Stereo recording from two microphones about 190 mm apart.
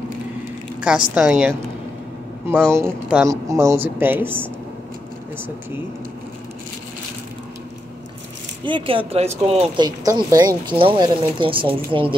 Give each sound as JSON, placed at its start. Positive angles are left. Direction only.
{"t": 0.7, "sound": "a sound", "side_deg": -5}
{"t": 1.1, "sound": "a woman's voice", "side_deg": 0}
{"t": 2.7, "sound": "a woman's voice", "side_deg": -10}
{"t": 8.6, "sound": "speech", "side_deg": -25}
{"t": 9.8, "sound": "speech", "side_deg": -20}